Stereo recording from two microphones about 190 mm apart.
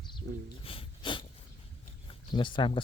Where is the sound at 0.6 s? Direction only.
30° left (ahead or behind).